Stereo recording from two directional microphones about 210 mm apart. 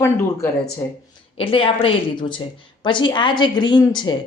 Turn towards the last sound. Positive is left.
turn(degrees=20)  # may be behind; listen again after turning